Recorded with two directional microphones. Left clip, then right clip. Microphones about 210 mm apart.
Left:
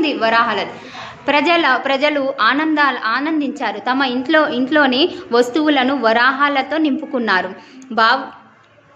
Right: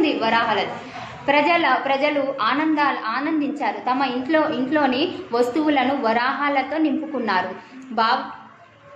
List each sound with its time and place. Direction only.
0.0 s a woman's voice: 55° left (ahead or behind)